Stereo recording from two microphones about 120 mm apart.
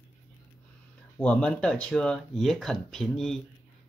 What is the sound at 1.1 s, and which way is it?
Speech, 10° left (ahead or behind).